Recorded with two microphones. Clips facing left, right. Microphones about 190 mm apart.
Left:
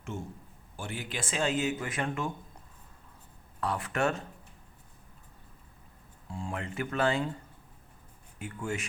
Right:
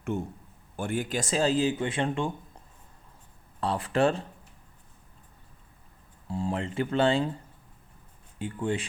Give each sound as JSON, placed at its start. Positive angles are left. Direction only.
{"t": 0.1, "sound": "a man's voice", "side_deg": -60}
{"t": 3.6, "sound": "speech", "side_deg": -30}
{"t": 6.2, "sound": "speech", "side_deg": -35}
{"t": 8.4, "sound": "speech", "side_deg": -30}